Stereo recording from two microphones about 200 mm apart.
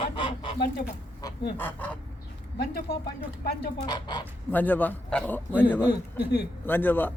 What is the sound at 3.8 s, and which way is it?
Goose, 20° left (ahead or behind).